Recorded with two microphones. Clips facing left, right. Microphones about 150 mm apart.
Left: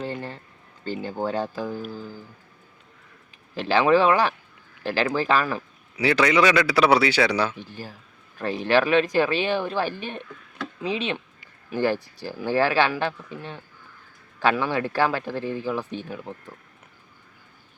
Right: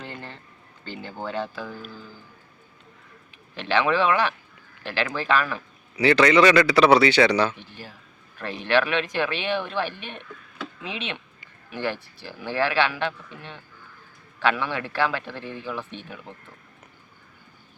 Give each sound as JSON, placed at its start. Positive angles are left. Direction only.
{"t": 0.0, "sound": "a sound", "side_deg": 35}
{"t": 1.3, "sound": "speech", "side_deg": 40}
{"t": 3.5, "sound": "speech", "side_deg": 40}
{"t": 6.0, "sound": "a man's voice", "side_deg": 10}
{"t": 7.5, "sound": "speech", "side_deg": 40}
{"t": 14.3, "sound": "speech", "side_deg": 40}